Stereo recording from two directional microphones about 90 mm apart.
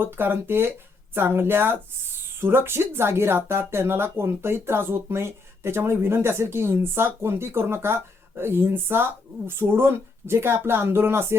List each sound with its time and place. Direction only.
0.0 s speech: 25° right (ahead or behind)